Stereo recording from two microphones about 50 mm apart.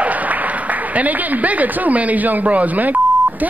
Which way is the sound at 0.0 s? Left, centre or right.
Right.